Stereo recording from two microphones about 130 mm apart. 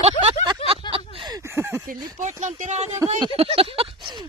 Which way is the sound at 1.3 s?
20° right (ahead or behind).